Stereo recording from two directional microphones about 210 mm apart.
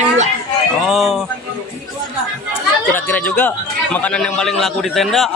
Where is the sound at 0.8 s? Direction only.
Centre (ahead or behind).